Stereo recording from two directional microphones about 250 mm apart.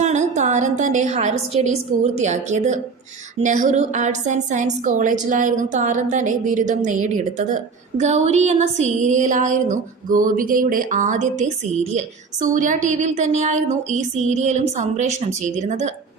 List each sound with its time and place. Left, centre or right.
0.0 s a woman's voice: right